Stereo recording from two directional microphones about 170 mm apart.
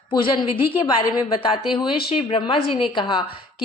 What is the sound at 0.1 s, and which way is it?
A woman's voice, 30° left (ahead or behind).